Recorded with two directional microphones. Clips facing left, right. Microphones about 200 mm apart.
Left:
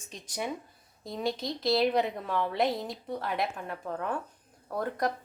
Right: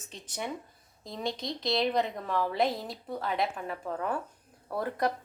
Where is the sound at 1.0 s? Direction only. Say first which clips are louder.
Left 2 dB; centre (ahead or behind).